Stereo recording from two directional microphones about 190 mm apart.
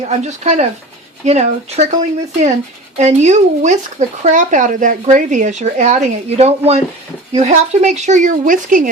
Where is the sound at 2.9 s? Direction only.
35° right (ahead or behind).